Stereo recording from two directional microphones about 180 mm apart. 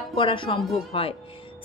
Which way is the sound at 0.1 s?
30° left (ahead or behind).